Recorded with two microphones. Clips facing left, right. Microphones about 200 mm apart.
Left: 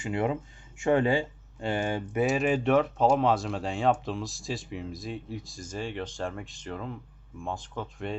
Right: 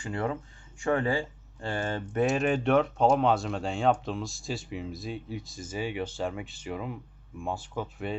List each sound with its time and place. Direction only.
0.0 s speech: 20° left (ahead or behind); by 8.2 s 5° right (ahead or behind)